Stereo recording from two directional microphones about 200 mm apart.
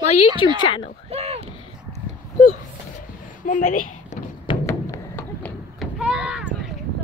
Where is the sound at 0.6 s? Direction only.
25° left (ahead or behind).